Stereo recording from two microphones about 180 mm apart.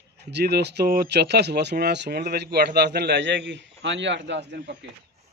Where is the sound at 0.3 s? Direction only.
65° right (ahead or behind).